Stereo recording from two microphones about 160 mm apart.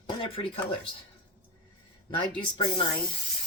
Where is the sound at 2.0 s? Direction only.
30° left (ahead or behind).